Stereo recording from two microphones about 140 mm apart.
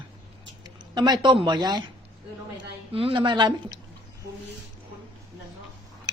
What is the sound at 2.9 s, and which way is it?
Speech, 40° right (ahead or behind).